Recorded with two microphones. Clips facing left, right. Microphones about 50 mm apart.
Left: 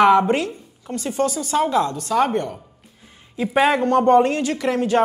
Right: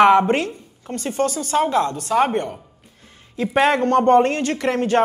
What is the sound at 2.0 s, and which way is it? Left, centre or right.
Speech, centre.